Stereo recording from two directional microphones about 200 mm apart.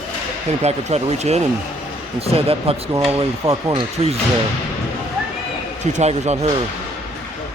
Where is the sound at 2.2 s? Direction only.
30° right (ahead or behind).